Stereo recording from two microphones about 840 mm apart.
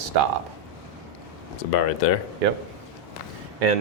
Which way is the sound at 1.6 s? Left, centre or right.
Left.